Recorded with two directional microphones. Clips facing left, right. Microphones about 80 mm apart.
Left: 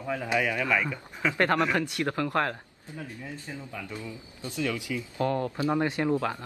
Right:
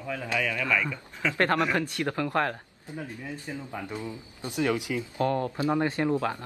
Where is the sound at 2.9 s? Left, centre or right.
Right.